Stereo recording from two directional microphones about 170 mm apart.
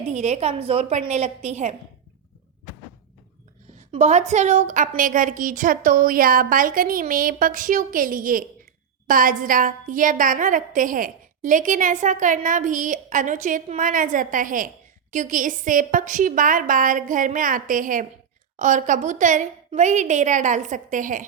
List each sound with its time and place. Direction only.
0.1 s a woman's voice: 40° right (ahead or behind)
3.9 s a woman's voice: 40° right (ahead or behind)